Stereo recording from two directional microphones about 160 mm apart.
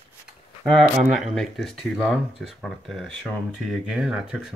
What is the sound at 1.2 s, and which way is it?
Speech, centre (ahead or behind).